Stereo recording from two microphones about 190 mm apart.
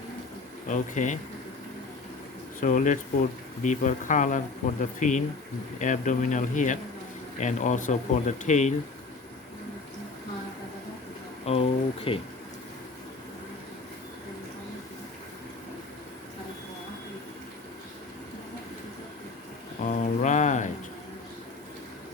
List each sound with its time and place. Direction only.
0.7 s speech: 40° left (ahead or behind)
2.6 s speech: 45° left (ahead or behind)
11.4 s speech: 30° left (ahead or behind)
19.8 s a sound: 40° left (ahead or behind)